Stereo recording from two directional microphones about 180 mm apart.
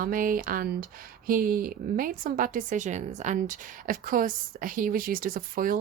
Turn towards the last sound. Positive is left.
turn(degrees=-50)  # may be behind; listen again after turning